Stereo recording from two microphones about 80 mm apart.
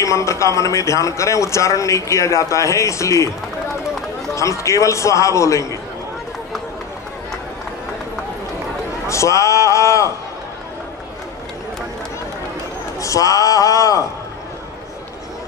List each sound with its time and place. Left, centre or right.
0.0 s a man's voice: left
4.4 s a man's voice: left
9.0 s a man's voice: left
13.0 s speech: left